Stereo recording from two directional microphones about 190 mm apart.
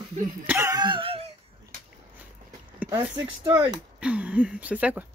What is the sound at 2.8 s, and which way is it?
Speech, 20° right (ahead or behind).